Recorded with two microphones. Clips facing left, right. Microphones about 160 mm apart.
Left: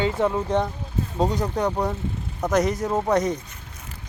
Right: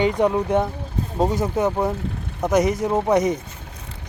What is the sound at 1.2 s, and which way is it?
Speech, centre (ahead or behind).